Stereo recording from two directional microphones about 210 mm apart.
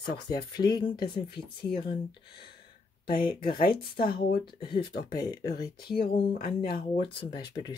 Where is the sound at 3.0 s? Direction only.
45° left (ahead or behind).